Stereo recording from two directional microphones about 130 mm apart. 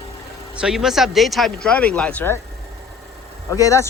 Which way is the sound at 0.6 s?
5° right (ahead or behind).